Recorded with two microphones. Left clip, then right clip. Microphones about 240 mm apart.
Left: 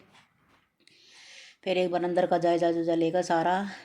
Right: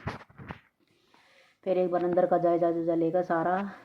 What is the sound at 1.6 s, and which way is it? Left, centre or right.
A woman's voice, left.